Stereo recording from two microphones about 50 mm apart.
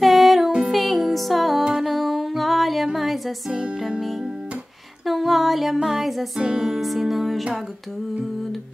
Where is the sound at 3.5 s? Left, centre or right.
Centre.